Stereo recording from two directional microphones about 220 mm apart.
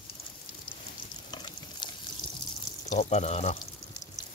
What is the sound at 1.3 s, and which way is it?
Frying, 20° left (ahead or behind).